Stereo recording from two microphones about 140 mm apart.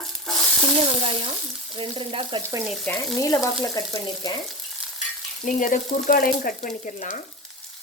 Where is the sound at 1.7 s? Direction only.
35° right (ahead or behind).